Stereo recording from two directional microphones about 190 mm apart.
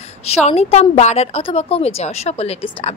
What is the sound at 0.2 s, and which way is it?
A woman's voice, 35° left (ahead or behind).